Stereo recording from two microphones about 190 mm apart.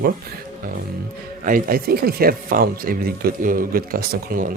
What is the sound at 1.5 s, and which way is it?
Speech, 50° right (ahead or behind).